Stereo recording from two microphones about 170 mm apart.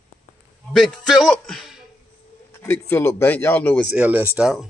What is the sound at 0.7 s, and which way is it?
A man's voice, centre (ahead or behind).